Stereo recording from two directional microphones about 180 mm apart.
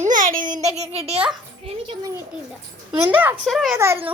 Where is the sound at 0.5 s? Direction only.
40° right (ahead or behind).